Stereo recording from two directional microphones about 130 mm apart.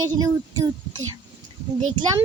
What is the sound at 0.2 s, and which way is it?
Speech, 30° right (ahead or behind).